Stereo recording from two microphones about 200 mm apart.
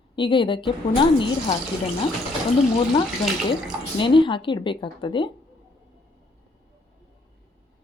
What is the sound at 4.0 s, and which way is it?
A woman's voice, 25° left (ahead or behind).